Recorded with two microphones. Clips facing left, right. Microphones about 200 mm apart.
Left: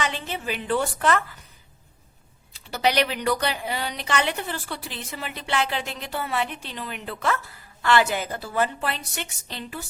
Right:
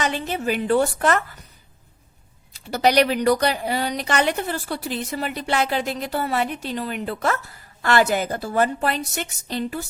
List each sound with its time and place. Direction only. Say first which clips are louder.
0.0 s a woman's voice: right 5 dB; 45° right (ahead or behind)
2.5 s a woman's voice: right 4 dB; 45° right (ahead or behind)